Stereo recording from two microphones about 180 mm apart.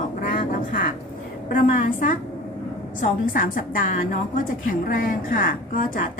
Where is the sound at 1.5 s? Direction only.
50° left (ahead or behind).